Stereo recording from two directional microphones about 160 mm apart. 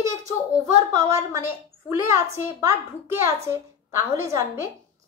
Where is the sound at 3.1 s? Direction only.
15° right (ahead or behind).